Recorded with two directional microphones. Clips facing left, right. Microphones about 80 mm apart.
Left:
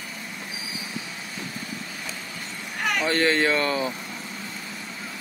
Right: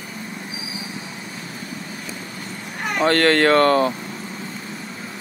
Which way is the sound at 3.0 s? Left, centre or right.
Right.